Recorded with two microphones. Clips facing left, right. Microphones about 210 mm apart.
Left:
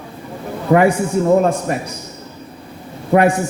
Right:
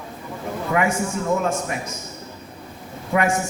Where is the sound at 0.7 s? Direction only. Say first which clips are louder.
Left 9 dB; 35° left (ahead or behind).